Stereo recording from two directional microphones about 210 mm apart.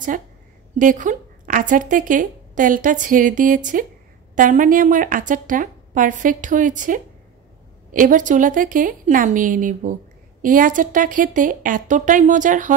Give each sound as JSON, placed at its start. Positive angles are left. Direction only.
{"t": 0.7, "sound": "a woman's voice", "side_deg": -40}